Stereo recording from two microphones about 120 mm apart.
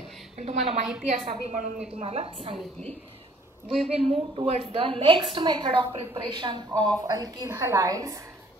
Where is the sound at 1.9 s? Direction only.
55° right (ahead or behind).